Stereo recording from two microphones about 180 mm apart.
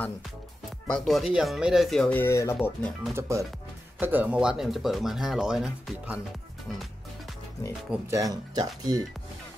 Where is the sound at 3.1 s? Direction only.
15° right (ahead or behind).